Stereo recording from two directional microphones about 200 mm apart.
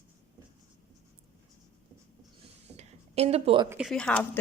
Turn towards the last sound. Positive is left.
turn(degrees=5)  # may be behind; listen again after turning